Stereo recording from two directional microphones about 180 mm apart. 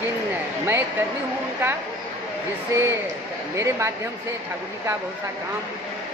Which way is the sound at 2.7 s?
15° right (ahead or behind).